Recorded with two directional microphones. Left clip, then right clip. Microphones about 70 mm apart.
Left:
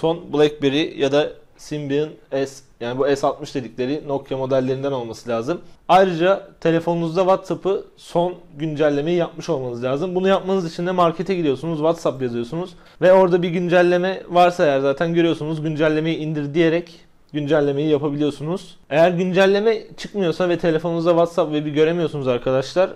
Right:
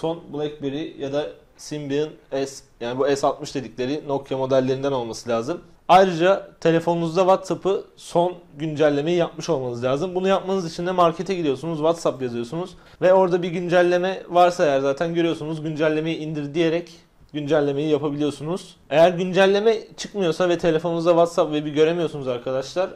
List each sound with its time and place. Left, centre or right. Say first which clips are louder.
0.3 s a man's voice: left 10 dB; left
1.7 s a man's voice: left 3 dB; centre
10.1 s a man's voice: left 3 dB; centre
22.2 s speech: left 5 dB; left